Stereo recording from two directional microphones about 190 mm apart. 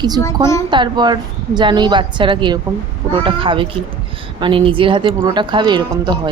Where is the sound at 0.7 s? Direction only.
25° right (ahead or behind).